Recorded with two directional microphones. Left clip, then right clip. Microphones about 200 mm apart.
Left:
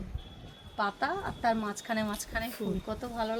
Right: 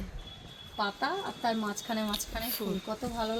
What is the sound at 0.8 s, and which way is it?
Speech, centre (ahead or behind).